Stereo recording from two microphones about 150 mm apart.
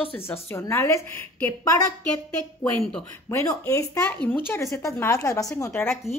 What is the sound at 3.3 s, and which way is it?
A woman's voice, 20° left (ahead or behind).